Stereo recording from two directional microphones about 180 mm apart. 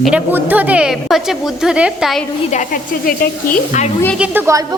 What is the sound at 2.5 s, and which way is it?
Speech, 45° left (ahead or behind).